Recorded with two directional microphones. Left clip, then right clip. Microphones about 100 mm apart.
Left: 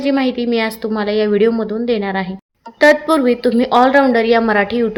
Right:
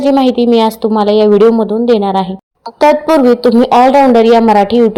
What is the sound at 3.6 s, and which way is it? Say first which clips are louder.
A woman's voice: right 4 dB; 45° right (ahead or behind).